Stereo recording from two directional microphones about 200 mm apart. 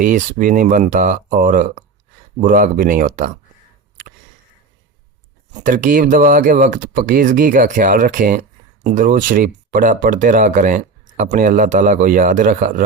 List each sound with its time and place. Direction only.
0.0 s speech: 40° right (ahead or behind)
5.6 s speech: 40° right (ahead or behind)